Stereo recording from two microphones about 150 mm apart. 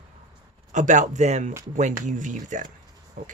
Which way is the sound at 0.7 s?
55° right (ahead or behind).